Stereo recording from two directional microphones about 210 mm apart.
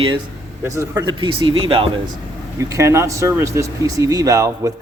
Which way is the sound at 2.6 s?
15° right (ahead or behind).